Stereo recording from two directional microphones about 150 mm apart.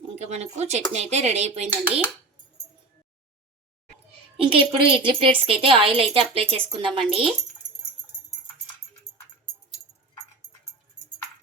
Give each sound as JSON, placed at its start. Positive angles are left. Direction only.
{"t": 0.2, "sound": "speech", "side_deg": -50}
{"t": 4.4, "sound": "speech", "side_deg": -40}